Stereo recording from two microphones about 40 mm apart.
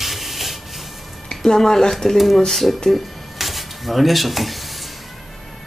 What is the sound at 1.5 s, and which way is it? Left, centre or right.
Speech, centre.